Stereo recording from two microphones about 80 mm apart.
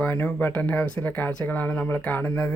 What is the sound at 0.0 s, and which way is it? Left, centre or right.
Speech, left.